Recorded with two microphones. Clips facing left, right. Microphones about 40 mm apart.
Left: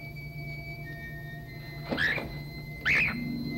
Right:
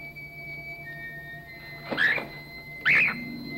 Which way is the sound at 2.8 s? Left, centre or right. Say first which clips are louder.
Right 4 dB; centre.